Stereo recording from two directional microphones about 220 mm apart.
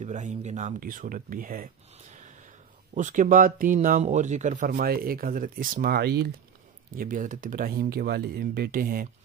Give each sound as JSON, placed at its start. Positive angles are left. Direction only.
{"t": 0.0, "sound": "speech", "side_deg": -35}